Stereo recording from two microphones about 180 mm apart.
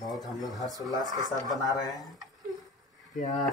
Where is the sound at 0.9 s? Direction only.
20° right (ahead or behind).